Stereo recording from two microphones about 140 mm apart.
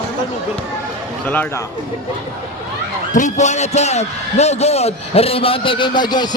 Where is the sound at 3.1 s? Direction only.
60° left (ahead or behind).